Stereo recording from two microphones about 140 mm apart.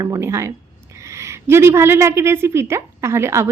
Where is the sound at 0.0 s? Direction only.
20° right (ahead or behind).